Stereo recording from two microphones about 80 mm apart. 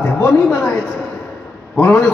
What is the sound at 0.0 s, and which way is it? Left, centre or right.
Speech, left.